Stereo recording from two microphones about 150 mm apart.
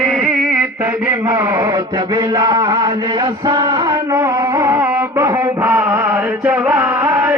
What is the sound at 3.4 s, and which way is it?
Music, 30° right (ahead or behind).